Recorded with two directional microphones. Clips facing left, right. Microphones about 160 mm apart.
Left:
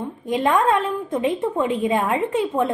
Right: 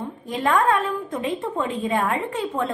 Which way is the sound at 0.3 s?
20° left (ahead or behind).